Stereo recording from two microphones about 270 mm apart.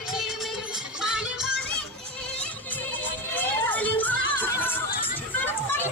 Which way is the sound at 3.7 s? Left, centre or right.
Centre.